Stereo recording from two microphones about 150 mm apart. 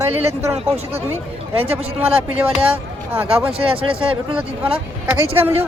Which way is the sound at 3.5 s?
40° right (ahead or behind).